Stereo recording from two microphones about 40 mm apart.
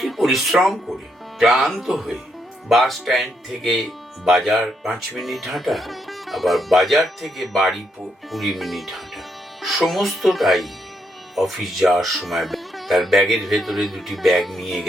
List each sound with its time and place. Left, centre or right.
0.0 s music: centre
1.4 s speech: centre